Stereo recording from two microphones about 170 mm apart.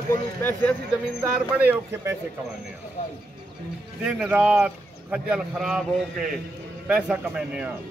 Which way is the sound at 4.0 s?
5° right (ahead or behind).